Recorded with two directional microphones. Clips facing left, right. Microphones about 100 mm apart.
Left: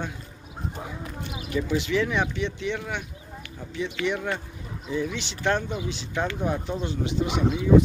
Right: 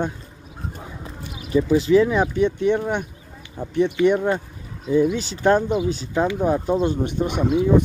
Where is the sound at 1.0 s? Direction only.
30° right (ahead or behind); by 3.9 s 55° right (ahead or behind).